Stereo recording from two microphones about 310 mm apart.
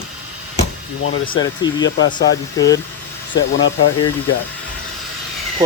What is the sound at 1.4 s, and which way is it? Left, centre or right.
Speech, centre.